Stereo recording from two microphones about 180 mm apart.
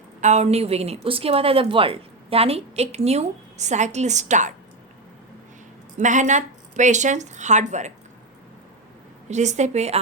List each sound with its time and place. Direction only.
0.2 s a woman's voice: 40° right (ahead or behind)
6.0 s a woman's voice: 45° right (ahead or behind)
9.3 s a woman's voice: 40° right (ahead or behind)